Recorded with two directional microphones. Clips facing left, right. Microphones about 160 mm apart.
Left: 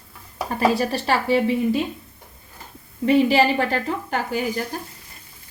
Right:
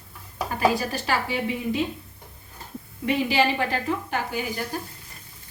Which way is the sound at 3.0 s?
35° left (ahead or behind).